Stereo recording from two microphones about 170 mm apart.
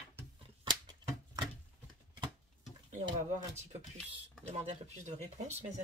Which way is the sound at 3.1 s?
45° right (ahead or behind).